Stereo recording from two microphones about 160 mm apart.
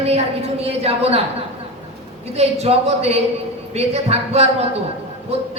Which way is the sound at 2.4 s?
40° right (ahead or behind).